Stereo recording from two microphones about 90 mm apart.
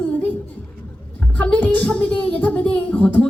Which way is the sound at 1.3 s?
15° left (ahead or behind).